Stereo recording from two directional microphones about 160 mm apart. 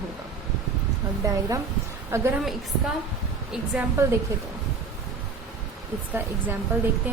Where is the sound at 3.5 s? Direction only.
10° right (ahead or behind).